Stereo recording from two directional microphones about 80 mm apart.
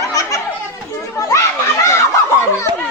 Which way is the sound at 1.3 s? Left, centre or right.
Left.